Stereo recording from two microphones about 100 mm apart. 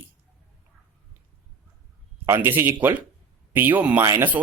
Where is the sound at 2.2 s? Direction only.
20° right (ahead or behind).